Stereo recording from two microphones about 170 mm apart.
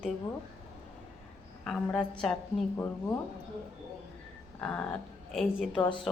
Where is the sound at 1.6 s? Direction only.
5° left (ahead or behind).